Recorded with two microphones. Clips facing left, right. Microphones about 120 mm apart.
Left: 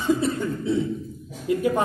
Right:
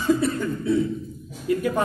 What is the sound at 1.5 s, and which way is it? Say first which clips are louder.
Speech: even; 20° left (ahead or behind).